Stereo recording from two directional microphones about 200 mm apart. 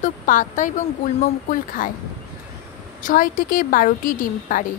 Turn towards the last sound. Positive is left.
turn(degrees=40)  # may be behind; listen again after turning